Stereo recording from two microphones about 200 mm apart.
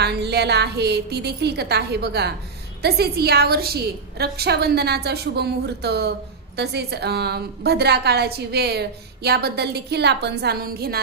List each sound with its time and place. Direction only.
0.0 s a woman's voice: 55° right (ahead or behind)